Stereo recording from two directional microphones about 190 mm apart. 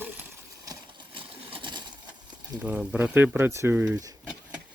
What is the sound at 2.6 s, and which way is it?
Speech, 5° right (ahead or behind).